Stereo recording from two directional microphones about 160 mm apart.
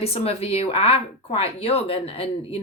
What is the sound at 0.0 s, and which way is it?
Speech, 40° left (ahead or behind).